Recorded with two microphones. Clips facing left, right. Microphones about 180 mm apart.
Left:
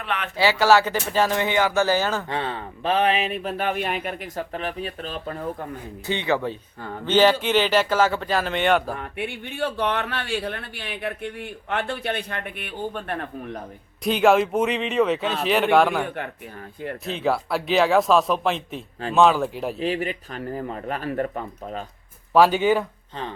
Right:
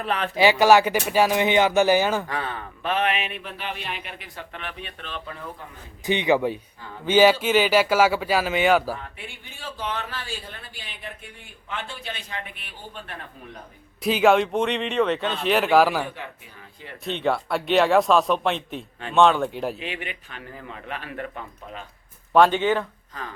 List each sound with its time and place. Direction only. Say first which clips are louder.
0.0 s speech: right 3 dB; 35° right (ahead or behind)
0.3 s speech: right 2 dB; 15° right (ahead or behind)
2.3 s speech: left 2 dB; 25° left (ahead or behind); by 5.6 s 45° left (ahead or behind)
6.1 s speech: right 3 dB; 15° right (ahead or behind)
9.0 s a man's voice: left 9 dB; 60° left (ahead or behind)
14.0 s speech: even; centre (ahead or behind)
17.1 s speech: even; centre (ahead or behind)
19.8 s speech: left 9 dB; 40° left (ahead or behind)
22.3 s speech: left 1 dB; 5° left (ahead or behind)